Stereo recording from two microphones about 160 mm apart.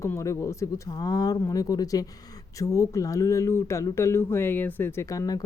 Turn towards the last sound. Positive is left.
turn(degrees=20)  # may be behind; listen again after turning